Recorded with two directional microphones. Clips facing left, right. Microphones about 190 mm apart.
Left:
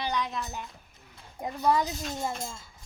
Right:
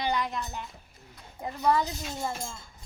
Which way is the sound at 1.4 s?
10° left (ahead or behind).